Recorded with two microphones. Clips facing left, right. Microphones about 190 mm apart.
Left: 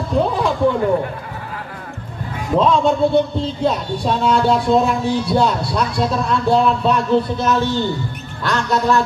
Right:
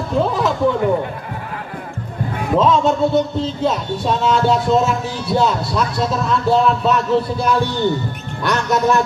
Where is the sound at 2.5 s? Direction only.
Centre (ahead or behind).